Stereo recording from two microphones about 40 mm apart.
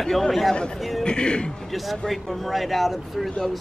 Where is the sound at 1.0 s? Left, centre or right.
Left.